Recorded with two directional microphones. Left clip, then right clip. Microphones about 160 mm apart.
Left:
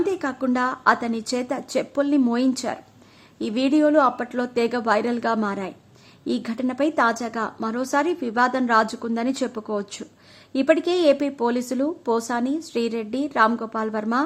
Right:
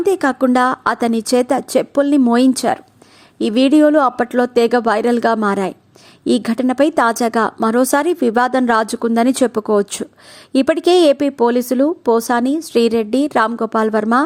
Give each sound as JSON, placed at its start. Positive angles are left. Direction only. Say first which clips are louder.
{"t": 0.0, "sound": "speech", "louder": "right 9 dB", "side_deg": -45}